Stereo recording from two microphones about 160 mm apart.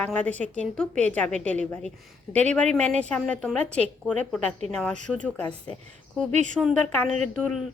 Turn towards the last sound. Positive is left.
turn(degrees=5)  # may be behind; listen again after turning